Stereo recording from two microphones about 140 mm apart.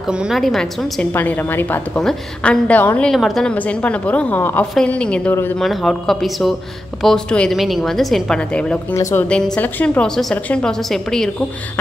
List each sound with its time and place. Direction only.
0.1 s a woman's voice: 5° right (ahead or behind)
1.1 s a woman's voice: 15° left (ahead or behind)
2.0 s a woman's voice: 5° left (ahead or behind)
3.1 s a woman's voice: centre (ahead or behind)
8.9 s a woman's voice: 20° left (ahead or behind)
9.3 s a woman's voice: 10° left (ahead or behind)